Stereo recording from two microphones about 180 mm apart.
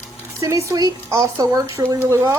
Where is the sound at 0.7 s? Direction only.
20° right (ahead or behind).